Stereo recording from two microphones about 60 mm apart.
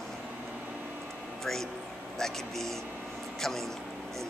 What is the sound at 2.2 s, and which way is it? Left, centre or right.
A woman's voice, centre.